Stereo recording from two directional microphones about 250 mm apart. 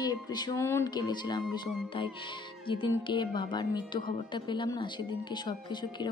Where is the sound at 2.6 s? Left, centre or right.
Centre.